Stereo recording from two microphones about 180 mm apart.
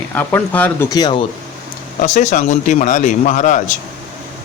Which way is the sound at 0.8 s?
20° left (ahead or behind).